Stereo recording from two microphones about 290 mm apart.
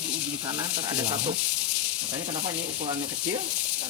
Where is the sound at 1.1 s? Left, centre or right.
Centre.